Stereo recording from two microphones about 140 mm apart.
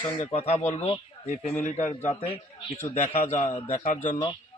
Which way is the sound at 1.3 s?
55° left (ahead or behind).